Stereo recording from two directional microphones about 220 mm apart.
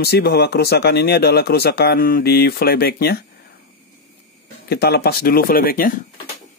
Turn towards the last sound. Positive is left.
turn(degrees=40)  # may be behind; listen again after turning